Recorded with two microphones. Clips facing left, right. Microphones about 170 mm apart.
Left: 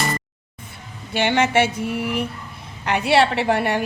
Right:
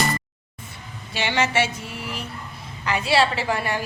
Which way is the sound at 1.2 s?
55° left (ahead or behind).